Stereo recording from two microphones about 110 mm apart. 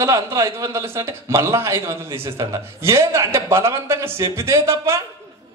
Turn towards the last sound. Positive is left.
turn(degrees=-25)  # may be behind; listen again after turning